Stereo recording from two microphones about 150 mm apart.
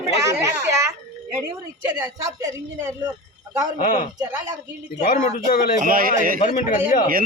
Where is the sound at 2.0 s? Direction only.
20° right (ahead or behind).